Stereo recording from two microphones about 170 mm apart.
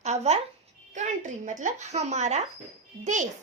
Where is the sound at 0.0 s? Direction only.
40° right (ahead or behind).